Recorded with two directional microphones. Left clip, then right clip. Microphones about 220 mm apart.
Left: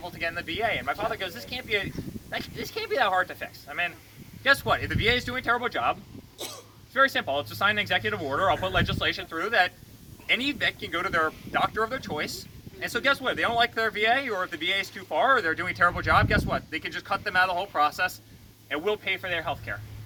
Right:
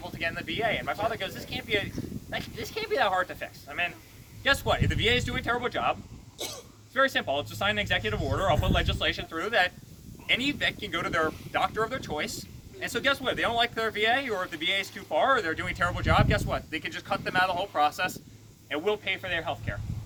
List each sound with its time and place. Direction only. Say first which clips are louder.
0.0 s speech: left 1 dB; centre (ahead or behind)
6.4 s speech: right 1 dB; 55° left (ahead or behind)
6.9 s speech: left 2 dB; centre (ahead or behind)